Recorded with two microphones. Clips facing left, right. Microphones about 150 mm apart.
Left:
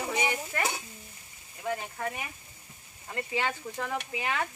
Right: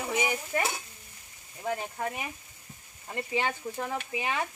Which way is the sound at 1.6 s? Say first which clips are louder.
Right 1 dB; 15° right (ahead or behind).